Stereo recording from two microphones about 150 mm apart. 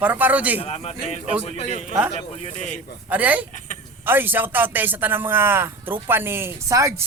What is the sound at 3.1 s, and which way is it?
A man's voice, 10° right (ahead or behind).